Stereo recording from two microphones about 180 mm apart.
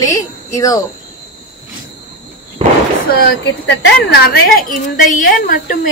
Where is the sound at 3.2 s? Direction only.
70° left (ahead or behind).